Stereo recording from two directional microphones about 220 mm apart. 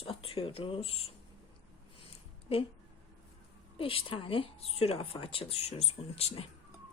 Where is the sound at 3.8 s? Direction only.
25° left (ahead or behind).